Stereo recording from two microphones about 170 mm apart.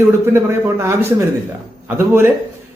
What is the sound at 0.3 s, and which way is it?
Speech, 15° right (ahead or behind).